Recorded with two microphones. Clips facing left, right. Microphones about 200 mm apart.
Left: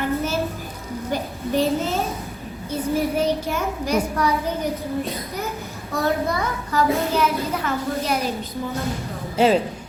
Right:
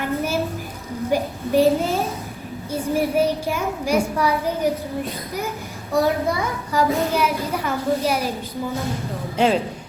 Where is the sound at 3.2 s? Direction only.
10° right (ahead or behind).